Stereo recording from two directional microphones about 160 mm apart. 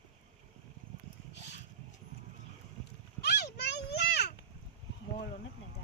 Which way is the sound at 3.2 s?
90° left.